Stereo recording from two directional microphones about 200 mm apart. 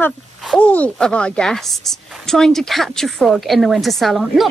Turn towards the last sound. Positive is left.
turn(degrees=0)  # may be behind; listen again after turning